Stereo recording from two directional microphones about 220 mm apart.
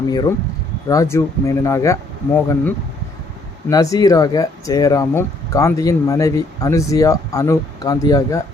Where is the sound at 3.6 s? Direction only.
15° left (ahead or behind).